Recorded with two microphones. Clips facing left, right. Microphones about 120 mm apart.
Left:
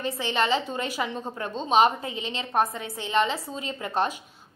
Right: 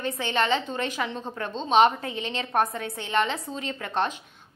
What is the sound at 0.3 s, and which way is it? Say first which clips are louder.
A woman's voice: even; 5° left (ahead or behind).